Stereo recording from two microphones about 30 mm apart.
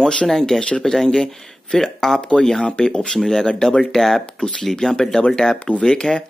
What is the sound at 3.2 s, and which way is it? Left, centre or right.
Speech, centre.